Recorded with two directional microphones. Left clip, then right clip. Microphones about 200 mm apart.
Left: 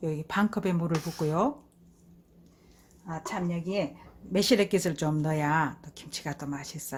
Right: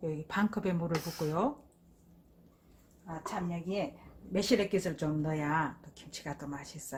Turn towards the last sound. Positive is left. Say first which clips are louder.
# left 5 dB
turn(degrees=35)  # may be behind; listen again after turning